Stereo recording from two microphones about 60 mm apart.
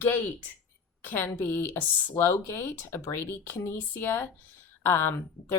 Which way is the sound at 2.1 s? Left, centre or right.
Left.